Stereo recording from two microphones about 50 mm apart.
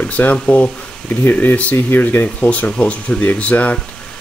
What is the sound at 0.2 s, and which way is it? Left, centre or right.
Speech, left.